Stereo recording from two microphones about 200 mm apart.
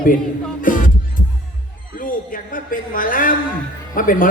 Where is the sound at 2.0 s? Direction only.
45° left (ahead or behind).